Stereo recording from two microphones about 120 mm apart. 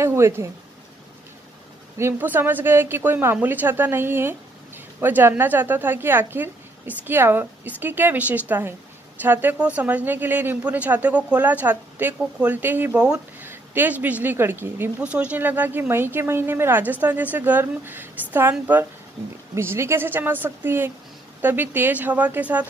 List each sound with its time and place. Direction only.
0.0 s a woman's voice: 20° right (ahead or behind)
2.0 s a woman's voice: 20° right (ahead or behind)